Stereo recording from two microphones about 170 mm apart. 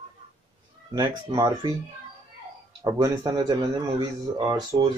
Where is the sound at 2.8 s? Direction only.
20° right (ahead or behind).